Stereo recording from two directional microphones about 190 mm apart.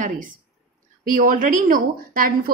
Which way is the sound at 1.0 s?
45° right (ahead or behind).